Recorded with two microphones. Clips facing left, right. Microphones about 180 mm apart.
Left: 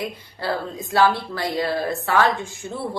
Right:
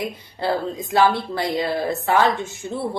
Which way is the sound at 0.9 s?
20° right (ahead or behind).